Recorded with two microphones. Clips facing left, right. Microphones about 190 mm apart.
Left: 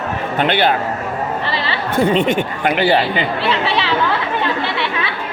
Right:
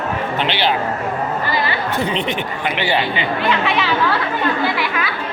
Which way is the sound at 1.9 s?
50° left (ahead or behind).